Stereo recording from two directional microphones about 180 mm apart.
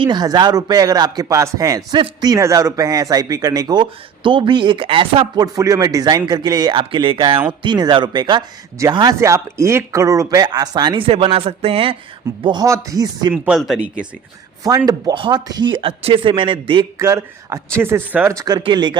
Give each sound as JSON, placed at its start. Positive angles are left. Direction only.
{"t": 0.0, "sound": "speech", "side_deg": -25}
{"t": 5.5, "sound": "speech", "side_deg": -20}
{"t": 13.3, "sound": "speech", "side_deg": -5}
{"t": 14.6, "sound": "speech", "side_deg": -20}
{"t": 17.0, "sound": "speech", "side_deg": -15}